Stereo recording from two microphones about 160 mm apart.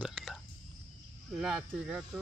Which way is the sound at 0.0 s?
5° right (ahead or behind).